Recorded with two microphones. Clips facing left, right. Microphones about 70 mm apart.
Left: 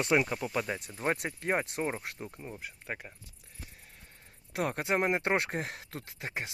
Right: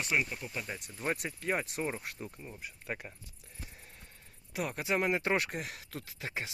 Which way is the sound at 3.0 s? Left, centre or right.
Centre.